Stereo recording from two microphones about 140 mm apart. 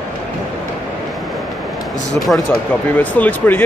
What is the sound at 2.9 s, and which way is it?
Speech, 10° left (ahead or behind).